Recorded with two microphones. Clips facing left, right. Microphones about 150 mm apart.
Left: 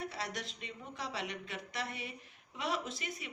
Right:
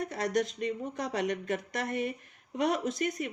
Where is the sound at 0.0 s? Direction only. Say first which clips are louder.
Right 11 dB; 45° right (ahead or behind).